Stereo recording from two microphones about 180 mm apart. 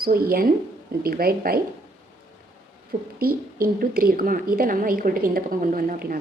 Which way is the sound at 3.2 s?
55° right (ahead or behind).